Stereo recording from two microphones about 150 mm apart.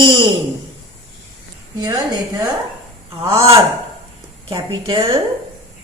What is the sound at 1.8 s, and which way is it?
A woman's voice, 25° right (ahead or behind).